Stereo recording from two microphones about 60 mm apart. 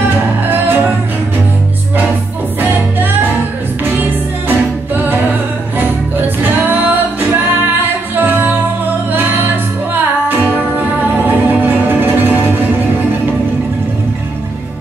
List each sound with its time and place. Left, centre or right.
0.1 s music: right
2.6 s music: right
11.2 s music: right